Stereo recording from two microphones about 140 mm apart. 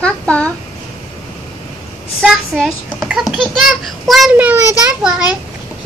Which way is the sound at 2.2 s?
Centre (ahead or behind).